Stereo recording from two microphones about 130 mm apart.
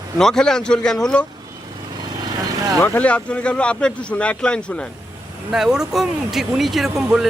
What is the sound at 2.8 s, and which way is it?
Speech, 15° left (ahead or behind).